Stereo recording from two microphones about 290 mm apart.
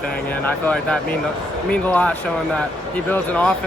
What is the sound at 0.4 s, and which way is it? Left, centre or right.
Speech, centre.